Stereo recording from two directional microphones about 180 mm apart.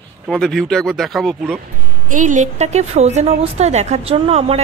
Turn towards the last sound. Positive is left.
turn(degrees=-35)  # may be behind; listen again after turning